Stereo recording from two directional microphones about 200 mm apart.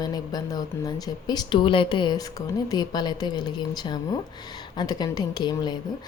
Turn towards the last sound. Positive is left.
turn(degrees=20)  # may be behind; listen again after turning